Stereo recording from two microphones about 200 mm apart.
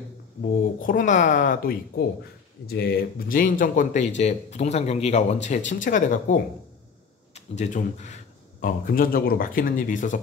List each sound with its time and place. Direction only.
0.7 s speech: 40° left (ahead or behind)